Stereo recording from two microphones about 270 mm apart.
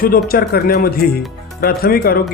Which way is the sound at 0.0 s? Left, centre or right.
Left.